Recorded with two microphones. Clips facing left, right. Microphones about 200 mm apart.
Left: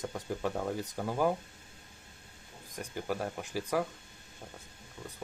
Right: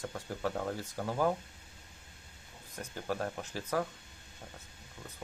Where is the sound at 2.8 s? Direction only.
10° left (ahead or behind).